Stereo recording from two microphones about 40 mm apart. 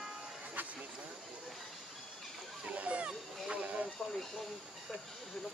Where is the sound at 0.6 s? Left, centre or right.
Right.